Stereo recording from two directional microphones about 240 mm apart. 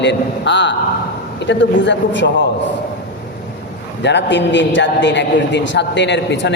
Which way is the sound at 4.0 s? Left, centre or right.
Left.